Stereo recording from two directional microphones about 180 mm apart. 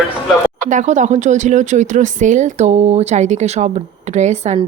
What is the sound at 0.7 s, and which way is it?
Speech, 45° right (ahead or behind).